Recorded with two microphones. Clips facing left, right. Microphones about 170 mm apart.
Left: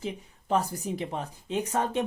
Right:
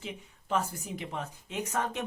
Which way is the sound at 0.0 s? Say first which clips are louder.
Left 6 dB; 35° left (ahead or behind).